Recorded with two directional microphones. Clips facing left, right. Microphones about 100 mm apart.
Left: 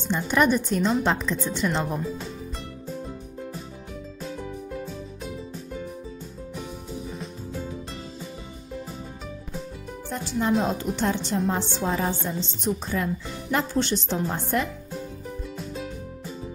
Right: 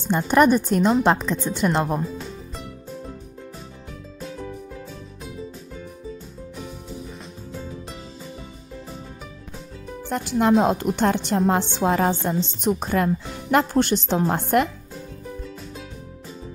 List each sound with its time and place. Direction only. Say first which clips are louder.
0.1 s speech: right 5 dB; 45° right (ahead or behind)
4.2 s music: right 1 dB; centre (ahead or behind)
6.5 s music: even; centre (ahead or behind)
10.0 s music: right 6 dB; 65° right (ahead or behind)
10.6 s a woman's voice: right 5 dB; 65° right (ahead or behind)